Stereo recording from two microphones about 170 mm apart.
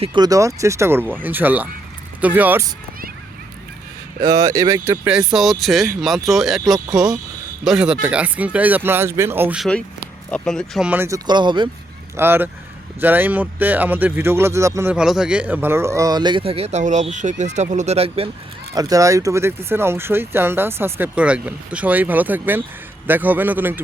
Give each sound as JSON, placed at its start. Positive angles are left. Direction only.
{"t": 0.0, "sound": "speech", "side_deg": -25}
{"t": 4.2, "sound": "speech", "side_deg": -20}
{"t": 5.0, "sound": "speech", "side_deg": -5}
{"t": 10.3, "sound": "speech", "side_deg": 5}
{"t": 10.8, "sound": "speech", "side_deg": -15}
{"t": 11.3, "sound": "speech", "side_deg": -25}
{"t": 12.1, "sound": "speech", "side_deg": -15}
{"t": 14.9, "sound": "speech", "side_deg": -5}
{"t": 18.7, "sound": "speech", "side_deg": -20}